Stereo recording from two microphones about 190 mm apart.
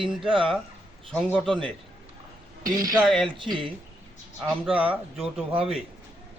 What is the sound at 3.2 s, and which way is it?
Speech, 25° right (ahead or behind).